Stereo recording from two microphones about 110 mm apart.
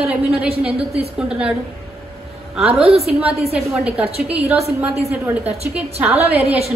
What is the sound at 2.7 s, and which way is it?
Speech, 65° right (ahead or behind).